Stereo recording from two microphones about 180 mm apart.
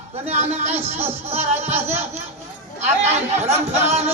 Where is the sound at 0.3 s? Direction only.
40° right (ahead or behind).